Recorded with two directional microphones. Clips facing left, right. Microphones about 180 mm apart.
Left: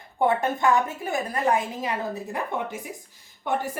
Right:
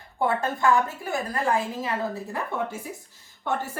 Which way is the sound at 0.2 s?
20° left (ahead or behind).